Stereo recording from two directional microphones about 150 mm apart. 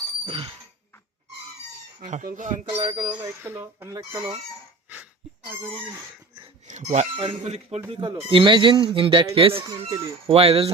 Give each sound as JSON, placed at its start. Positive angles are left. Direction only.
{"t": 0.3, "sound": "speech", "side_deg": -35}
{"t": 2.0, "sound": "speech", "side_deg": -60}
{"t": 2.6, "sound": "speech", "side_deg": -35}
{"t": 3.1, "sound": "speech", "side_deg": -15}
{"t": 6.7, "sound": "speech", "side_deg": -50}
{"t": 7.9, "sound": "speech", "side_deg": -30}